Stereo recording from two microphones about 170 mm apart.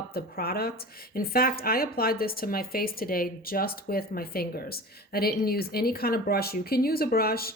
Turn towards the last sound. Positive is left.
turn(degrees=60)  # may be behind; listen again after turning